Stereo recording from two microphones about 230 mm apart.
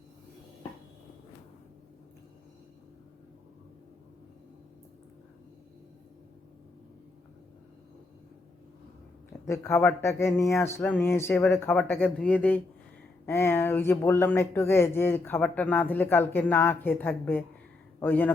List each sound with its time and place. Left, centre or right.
9.5 s speech: centre